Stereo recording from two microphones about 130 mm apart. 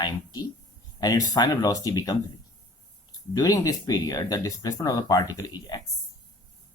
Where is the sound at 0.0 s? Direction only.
30° left (ahead or behind).